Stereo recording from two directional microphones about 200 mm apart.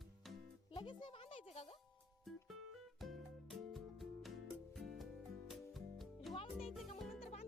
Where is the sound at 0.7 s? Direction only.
25° left (ahead or behind).